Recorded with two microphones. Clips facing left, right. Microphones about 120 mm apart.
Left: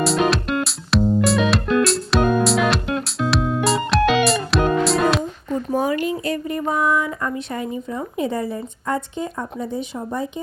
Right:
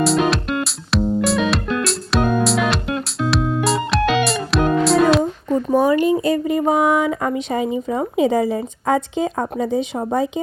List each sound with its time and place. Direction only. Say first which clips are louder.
0.0 s music: right 1 dB; centre (ahead or behind)
6.5 s a woman's voice: right 3 dB; 90° right